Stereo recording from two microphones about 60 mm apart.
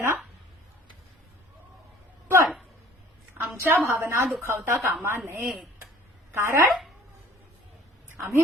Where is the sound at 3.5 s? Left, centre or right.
Right.